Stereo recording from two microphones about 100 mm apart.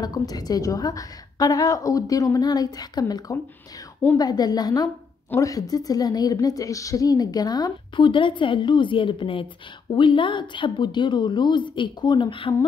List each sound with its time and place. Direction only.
0.0 s a woman's voice: 40° left (ahead or behind); by 12.5 s 60° left (ahead or behind)